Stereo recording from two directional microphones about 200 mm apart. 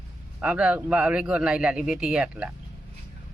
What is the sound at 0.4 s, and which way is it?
A man's voice, 5° right (ahead or behind).